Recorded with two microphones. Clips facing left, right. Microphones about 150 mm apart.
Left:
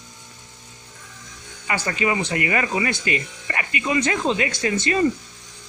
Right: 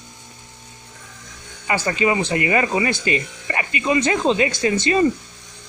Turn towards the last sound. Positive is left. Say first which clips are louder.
# right 3 dB
turn(degrees=-25)  # may be behind; listen again after turning